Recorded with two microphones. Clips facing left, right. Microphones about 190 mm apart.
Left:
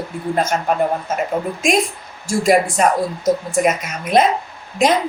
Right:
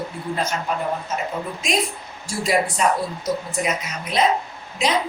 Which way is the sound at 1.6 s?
50° left (ahead or behind).